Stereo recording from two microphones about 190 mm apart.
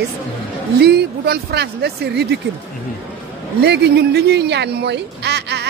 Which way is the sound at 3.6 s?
60° right (ahead or behind).